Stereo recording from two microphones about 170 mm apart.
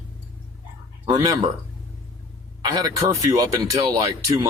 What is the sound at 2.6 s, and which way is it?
Speech, 25° right (ahead or behind).